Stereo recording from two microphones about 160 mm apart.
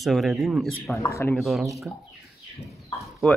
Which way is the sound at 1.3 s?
Centre (ahead or behind).